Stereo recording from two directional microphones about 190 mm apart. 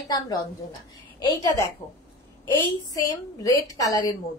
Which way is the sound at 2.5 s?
20° left (ahead or behind).